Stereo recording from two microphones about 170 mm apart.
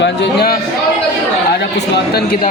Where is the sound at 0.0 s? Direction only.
80° left.